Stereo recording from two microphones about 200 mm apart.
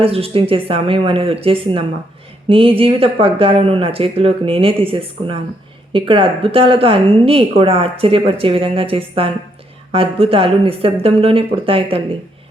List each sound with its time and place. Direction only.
0.0 s a woman's voice: 30° right (ahead or behind)